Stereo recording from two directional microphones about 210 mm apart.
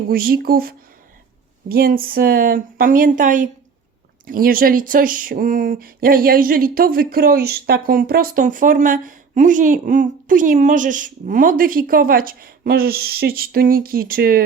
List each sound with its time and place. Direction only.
0.1 s speech: 45° right (ahead or behind)